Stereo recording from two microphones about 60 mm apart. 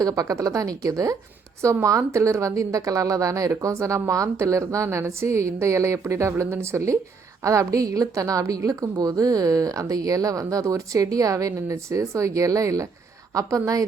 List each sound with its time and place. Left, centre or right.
0.0 s a woman's voice: right